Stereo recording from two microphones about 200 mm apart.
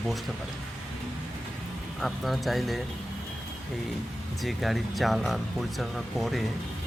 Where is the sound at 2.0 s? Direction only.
Centre (ahead or behind).